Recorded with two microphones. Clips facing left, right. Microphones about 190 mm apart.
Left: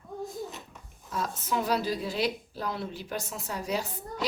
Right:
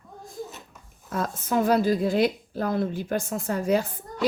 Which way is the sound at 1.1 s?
50° right (ahead or behind).